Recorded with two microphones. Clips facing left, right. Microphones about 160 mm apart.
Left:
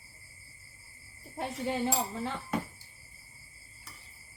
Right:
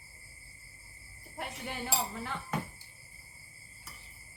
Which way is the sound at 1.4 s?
25° left (ahead or behind).